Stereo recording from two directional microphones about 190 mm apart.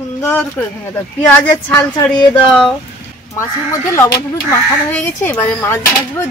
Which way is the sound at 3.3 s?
15° left (ahead or behind).